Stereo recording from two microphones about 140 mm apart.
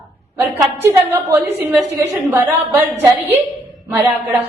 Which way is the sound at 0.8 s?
15° right (ahead or behind).